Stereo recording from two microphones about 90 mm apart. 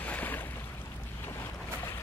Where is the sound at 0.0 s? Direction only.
20° left (ahead or behind).